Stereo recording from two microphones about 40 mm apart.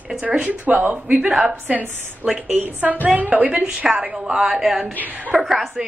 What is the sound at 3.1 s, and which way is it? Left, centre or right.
Speech, right.